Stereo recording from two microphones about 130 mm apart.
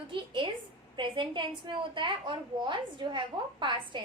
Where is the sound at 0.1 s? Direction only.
40° right (ahead or behind).